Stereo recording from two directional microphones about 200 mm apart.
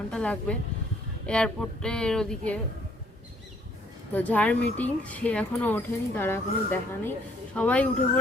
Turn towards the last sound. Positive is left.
turn(degrees=5)  # may be behind; listen again after turning